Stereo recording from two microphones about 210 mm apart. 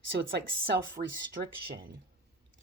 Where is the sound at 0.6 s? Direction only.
55° right (ahead or behind).